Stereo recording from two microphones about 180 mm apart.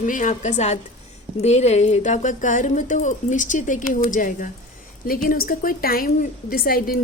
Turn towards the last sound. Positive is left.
turn(degrees=55)  # may be behind; listen again after turning